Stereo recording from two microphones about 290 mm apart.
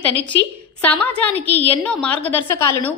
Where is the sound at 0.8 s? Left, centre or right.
Centre.